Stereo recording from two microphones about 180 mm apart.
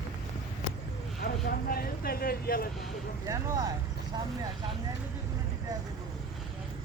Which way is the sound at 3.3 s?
20° right (ahead or behind).